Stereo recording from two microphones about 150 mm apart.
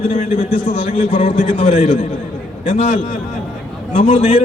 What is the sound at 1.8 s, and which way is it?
Speech, 60° left (ahead or behind).